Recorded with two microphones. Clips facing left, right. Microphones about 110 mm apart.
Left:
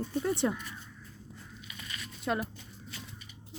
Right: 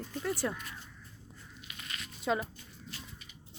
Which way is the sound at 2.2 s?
Centre (ahead or behind).